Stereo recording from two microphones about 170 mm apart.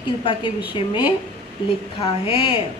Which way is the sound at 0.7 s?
30° left (ahead or behind).